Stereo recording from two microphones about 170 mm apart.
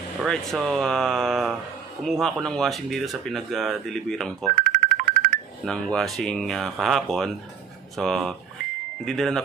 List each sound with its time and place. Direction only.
0.2 s speech: centre (ahead or behind)
4.5 s music: 55° right (ahead or behind)
5.6 s speech: 5° left (ahead or behind)